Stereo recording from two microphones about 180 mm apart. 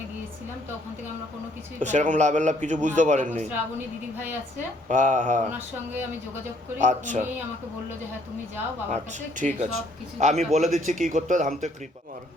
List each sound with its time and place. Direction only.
1.8 s a man's voice: 40° right (ahead or behind)
4.9 s speech: 45° right (ahead or behind)
5.5 s speech: 10° right (ahead or behind)
6.7 s speech: 45° right (ahead or behind)
8.9 s speech: 45° right (ahead or behind)